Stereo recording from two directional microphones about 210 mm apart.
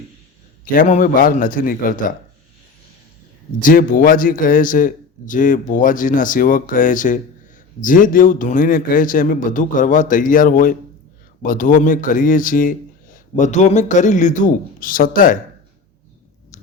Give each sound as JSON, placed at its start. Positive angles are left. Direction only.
{"t": 0.6, "sound": "a man's voice", "side_deg": 40}
{"t": 3.6, "sound": "a man's voice", "side_deg": 40}